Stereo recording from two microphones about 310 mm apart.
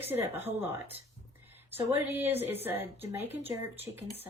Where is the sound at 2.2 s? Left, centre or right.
Centre.